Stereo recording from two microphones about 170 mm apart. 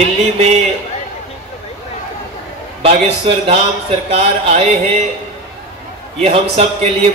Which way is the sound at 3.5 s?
35° right (ahead or behind).